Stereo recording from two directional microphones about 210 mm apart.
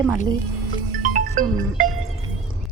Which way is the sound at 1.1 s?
40° right (ahead or behind).